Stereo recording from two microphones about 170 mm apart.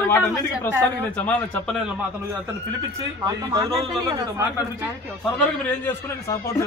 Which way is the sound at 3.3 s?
20° right (ahead or behind).